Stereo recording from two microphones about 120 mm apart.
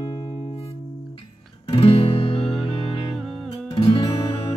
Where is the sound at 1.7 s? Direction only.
55° left (ahead or behind).